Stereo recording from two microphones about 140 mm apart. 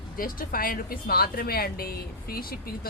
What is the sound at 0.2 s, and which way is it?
A woman's voice, 90° left.